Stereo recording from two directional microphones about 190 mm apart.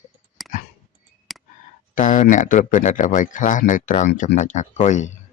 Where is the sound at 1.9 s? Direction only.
40° left (ahead or behind).